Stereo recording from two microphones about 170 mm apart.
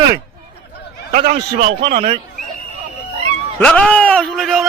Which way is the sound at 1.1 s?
55° right (ahead or behind).